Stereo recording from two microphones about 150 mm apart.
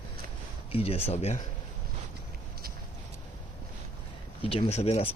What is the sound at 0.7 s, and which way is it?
Speech, 40° left (ahead or behind).